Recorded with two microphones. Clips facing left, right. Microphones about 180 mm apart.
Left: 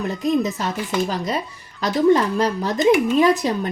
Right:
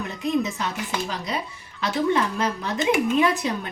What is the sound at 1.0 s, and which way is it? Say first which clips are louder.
Speech: left 5 dB; 45° left (ahead or behind).